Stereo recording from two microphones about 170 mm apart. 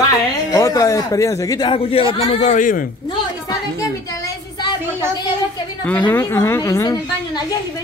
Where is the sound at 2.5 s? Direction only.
50° left (ahead or behind).